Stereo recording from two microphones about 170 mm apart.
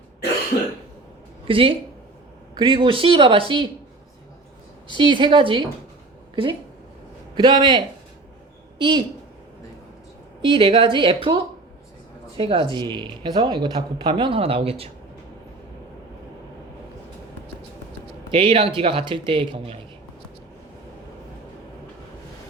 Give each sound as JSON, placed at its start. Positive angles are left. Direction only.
{"t": 1.5, "sound": "speech", "side_deg": -30}
{"t": 4.9, "sound": "speech", "side_deg": -30}
{"t": 7.3, "sound": "speech", "side_deg": -25}
{"t": 8.8, "sound": "speech", "side_deg": -30}
{"t": 10.4, "sound": "speech", "side_deg": -30}
{"t": 12.4, "sound": "speech", "side_deg": -30}
{"t": 18.3, "sound": "speech", "side_deg": -30}